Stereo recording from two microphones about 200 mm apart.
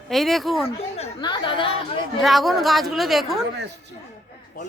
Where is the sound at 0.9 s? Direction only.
25° left (ahead or behind).